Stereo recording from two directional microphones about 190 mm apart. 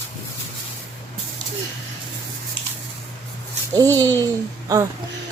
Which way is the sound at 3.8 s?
15° right (ahead or behind).